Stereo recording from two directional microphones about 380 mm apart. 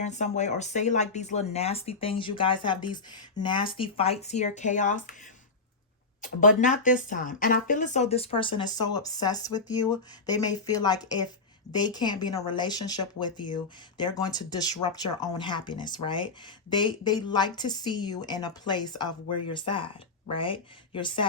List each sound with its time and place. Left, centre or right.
0.0 s speech: centre
6.2 s speech: left
19.3 s speech: left
19.5 s speech: centre